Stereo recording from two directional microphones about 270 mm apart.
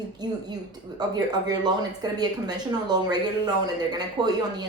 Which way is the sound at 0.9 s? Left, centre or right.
Centre.